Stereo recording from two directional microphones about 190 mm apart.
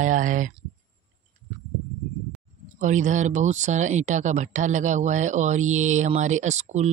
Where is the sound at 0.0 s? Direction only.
45° right (ahead or behind).